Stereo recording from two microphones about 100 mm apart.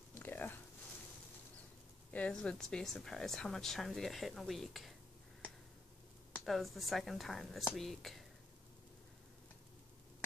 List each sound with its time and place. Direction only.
0.1 s a sound: 20° left (ahead or behind)
2.0 s speech: 15° left (ahead or behind)
6.4 s speech: centre (ahead or behind)